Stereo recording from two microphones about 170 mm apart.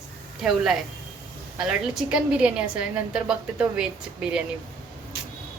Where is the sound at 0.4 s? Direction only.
Centre (ahead or behind).